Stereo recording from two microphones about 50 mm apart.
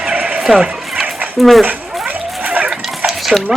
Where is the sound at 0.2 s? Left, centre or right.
Right.